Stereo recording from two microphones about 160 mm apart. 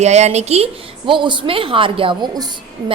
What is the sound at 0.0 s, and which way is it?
A woman's voice, 45° right (ahead or behind).